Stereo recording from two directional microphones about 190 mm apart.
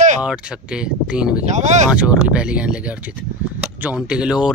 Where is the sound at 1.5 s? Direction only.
40° right (ahead or behind).